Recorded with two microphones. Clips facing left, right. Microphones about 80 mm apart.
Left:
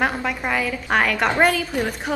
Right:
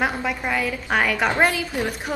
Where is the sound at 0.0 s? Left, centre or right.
Centre.